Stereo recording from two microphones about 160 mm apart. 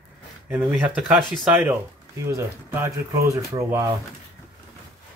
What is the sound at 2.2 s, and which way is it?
Speech, 15° right (ahead or behind).